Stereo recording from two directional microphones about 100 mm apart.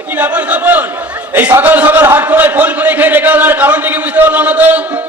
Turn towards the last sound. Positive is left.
turn(degrees=-15)  # may be behind; listen again after turning